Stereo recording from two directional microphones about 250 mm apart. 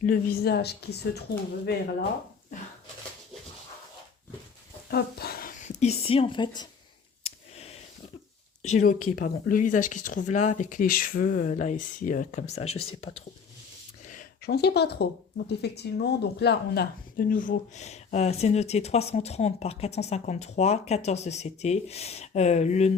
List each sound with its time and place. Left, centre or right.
0.0 s speech: left
4.9 s speech: left; by 6.7 s centre
7.3 s a sound: left
8.6 s speech: left
14.1 s a sound: left
15.4 s speech: left